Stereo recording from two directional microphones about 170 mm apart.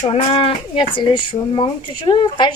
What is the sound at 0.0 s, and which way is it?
Speech, 30° left (ahead or behind).